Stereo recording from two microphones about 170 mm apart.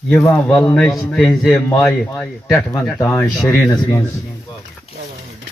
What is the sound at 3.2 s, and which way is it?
Speech, 15° left (ahead or behind).